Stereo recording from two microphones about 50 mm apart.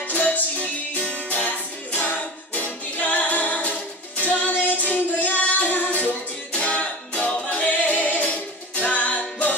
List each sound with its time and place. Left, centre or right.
0.1 s music: left